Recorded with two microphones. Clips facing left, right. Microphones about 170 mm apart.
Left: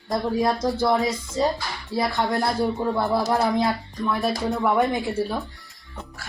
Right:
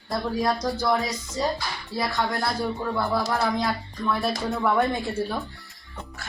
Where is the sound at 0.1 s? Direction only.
25° left (ahead or behind).